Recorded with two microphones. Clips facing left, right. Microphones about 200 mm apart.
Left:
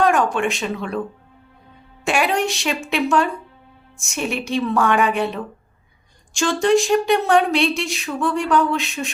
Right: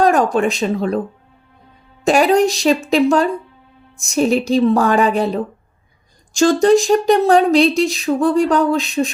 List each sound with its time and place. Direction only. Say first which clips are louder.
0.0 s speech: right 4 dB; 35° right (ahead or behind)
2.0 s speech: right 7 dB; 40° right (ahead or behind)